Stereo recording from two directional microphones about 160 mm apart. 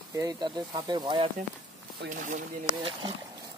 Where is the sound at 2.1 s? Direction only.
50° right (ahead or behind).